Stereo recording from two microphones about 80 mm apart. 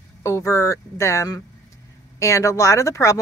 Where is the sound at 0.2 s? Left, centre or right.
Left.